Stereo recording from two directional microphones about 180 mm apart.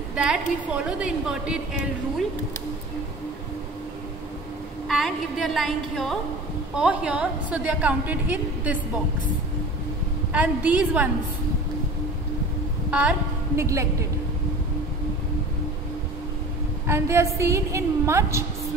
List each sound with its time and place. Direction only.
0.1 s a woman's voice: 5° right (ahead or behind)
4.8 s a woman's voice: centre (ahead or behind)
10.3 s a woman's voice: 10° right (ahead or behind)
13.6 s a woman's voice: 15° right (ahead or behind)
16.8 s a woman's voice: 15° right (ahead or behind)